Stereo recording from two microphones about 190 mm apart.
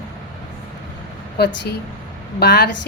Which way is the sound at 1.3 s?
60° left (ahead or behind).